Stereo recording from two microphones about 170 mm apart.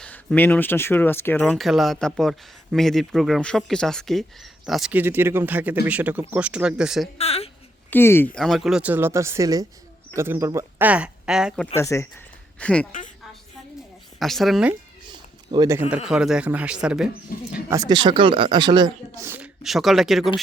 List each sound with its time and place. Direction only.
0.0 s speech: 10° left (ahead or behind)
7.2 s a woman's voice: 35° left (ahead or behind)
7.9 s speech: 15° left (ahead or behind); by 11.6 s 5° right (ahead or behind)
11.8 s speech: 15° left (ahead or behind)
14.2 s speech: centre (ahead or behind)
15.5 s speech: 20° right (ahead or behind)
16.0 s speech: 5° right (ahead or behind)
17.5 s speech: 20° right (ahead or behind)
19.6 s speech: centre (ahead or behind)